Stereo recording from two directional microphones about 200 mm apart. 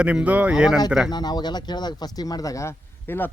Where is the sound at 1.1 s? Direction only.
20° left (ahead or behind).